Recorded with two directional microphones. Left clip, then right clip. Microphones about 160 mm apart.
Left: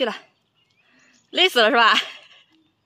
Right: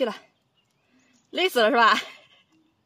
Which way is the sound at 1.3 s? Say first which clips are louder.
Left 4 dB; centre (ahead or behind).